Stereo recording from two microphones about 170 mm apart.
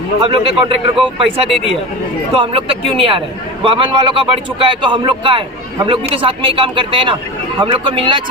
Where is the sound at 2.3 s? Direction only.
35° right (ahead or behind).